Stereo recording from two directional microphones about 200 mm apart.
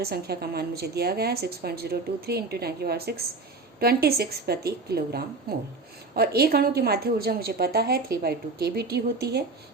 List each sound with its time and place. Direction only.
0.0 s a woman's voice: 50° right (ahead or behind)